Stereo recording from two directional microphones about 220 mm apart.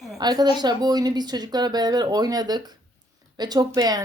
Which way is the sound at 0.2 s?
20° right (ahead or behind).